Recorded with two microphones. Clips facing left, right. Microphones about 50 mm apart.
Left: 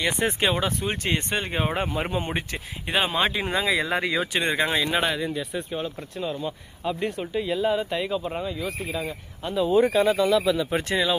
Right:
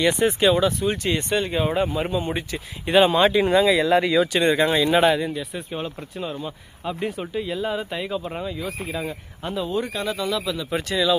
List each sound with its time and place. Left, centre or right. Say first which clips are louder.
0.2 s speech: right 4 dB; left
0.4 s speech: right 7 dB; left
2.8 s speech: right 7 dB; centre
4.9 s speech: right 6 dB; centre
9.6 s speech: left 7 dB; centre
10.8 s speech: even; left